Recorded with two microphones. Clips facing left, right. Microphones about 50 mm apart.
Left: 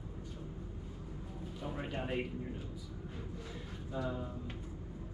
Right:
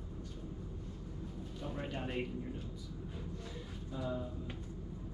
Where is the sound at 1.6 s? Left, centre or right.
Centre.